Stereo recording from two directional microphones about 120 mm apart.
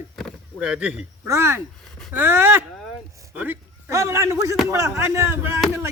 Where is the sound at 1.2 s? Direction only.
20° right (ahead or behind).